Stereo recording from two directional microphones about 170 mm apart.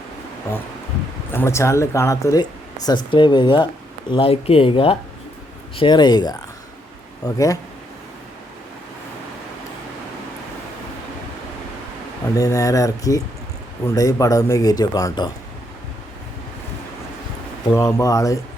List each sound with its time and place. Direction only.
1.3 s a man's voice: 15° left (ahead or behind)
12.4 s a man's voice: 20° left (ahead or behind)
17.7 s a man's voice: 15° left (ahead or behind)